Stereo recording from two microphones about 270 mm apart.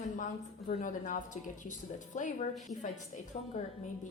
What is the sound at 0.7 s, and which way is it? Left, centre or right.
A woman's voice, left.